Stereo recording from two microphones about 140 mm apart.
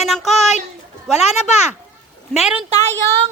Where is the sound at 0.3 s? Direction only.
55° left (ahead or behind).